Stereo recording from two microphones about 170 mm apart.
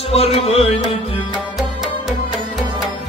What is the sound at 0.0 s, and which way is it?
Music, 35° left (ahead or behind).